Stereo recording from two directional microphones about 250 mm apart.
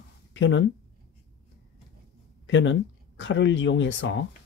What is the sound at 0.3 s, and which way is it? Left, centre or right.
Speech, left.